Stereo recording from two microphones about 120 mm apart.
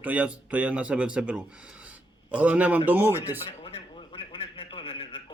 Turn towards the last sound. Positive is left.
turn(degrees=50)  # may be behind; listen again after turning